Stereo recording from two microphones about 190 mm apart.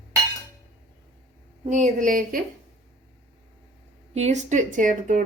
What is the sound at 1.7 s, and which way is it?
Speech, 40° right (ahead or behind).